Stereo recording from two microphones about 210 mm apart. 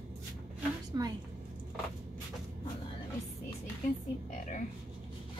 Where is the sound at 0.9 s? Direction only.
20° right (ahead or behind).